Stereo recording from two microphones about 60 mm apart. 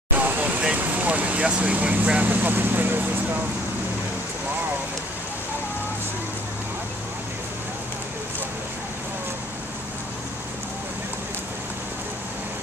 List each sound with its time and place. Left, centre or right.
0.2 s vehicle: right
0.7 s speech: right